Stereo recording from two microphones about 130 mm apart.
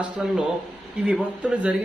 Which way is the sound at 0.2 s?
5° right (ahead or behind).